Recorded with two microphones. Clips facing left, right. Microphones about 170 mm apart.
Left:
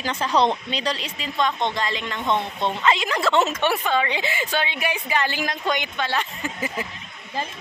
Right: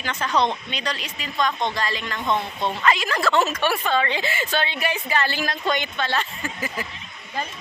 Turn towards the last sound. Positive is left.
turn(degrees=20)  # may be behind; listen again after turning